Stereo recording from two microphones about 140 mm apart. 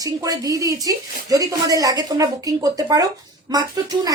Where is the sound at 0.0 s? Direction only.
25° right (ahead or behind).